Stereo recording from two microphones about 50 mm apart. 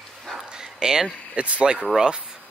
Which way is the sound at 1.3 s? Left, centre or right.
Right.